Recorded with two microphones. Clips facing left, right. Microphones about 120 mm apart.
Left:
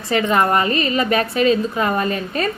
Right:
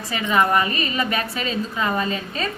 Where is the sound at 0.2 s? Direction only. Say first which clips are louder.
Left 2 dB; 40° left (ahead or behind).